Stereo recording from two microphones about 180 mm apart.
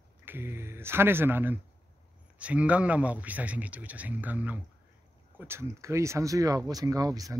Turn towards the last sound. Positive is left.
turn(degrees=-20)  # may be behind; listen again after turning